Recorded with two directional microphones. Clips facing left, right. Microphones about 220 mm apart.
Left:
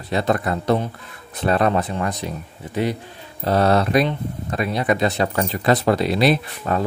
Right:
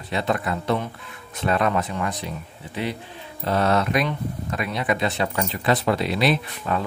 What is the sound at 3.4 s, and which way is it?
Speech, 35° left (ahead or behind).